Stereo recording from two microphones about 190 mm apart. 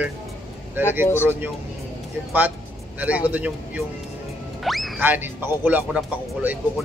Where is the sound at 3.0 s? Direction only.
5° right (ahead or behind).